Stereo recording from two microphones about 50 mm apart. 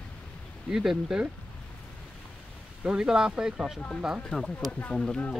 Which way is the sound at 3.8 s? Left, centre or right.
Centre.